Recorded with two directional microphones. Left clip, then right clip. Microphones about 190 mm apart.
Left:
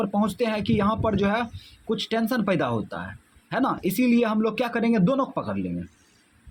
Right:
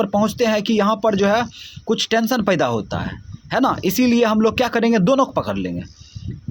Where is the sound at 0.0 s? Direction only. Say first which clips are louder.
Right 7 dB; 30° right (ahead or behind).